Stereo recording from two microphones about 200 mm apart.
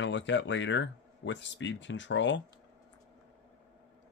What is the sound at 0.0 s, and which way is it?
Speech, 65° left (ahead or behind).